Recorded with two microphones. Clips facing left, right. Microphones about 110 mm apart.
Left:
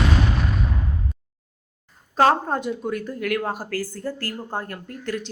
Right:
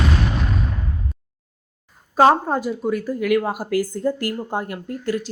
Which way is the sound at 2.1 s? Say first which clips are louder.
Right 3 dB; 10° right (ahead or behind).